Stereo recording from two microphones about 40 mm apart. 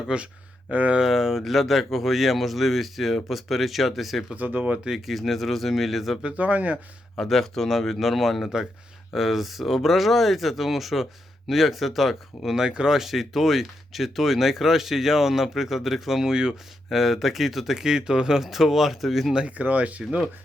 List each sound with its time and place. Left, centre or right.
0.1 s speech: right
0.7 s speech: right
1.0 s speech: centre
4.4 s speech: right
4.9 s speech: centre
6.2 s speech: right
7.2 s speech: centre
12.5 s speech: centre
13.0 s speech: centre
16.3 s speech: centre
16.9 s speech: centre
18.4 s speech: centre
19.5 s speech: right